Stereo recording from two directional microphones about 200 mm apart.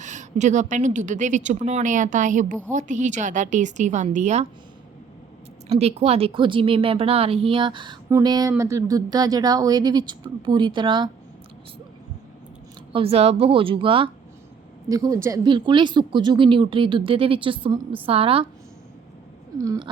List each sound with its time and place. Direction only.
0.0 s a woman's voice: 35° right (ahead or behind)
5.6 s speech: 30° right (ahead or behind)
12.9 s speech: 30° right (ahead or behind)
19.5 s a sound: 15° right (ahead or behind)